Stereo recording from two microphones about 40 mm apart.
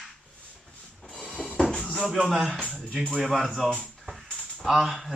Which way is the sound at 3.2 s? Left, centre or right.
Centre.